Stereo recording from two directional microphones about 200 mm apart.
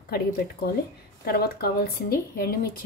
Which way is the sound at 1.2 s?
50° left (ahead or behind).